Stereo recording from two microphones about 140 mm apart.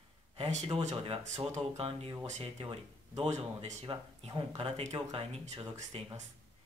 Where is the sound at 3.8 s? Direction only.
35° right (ahead or behind).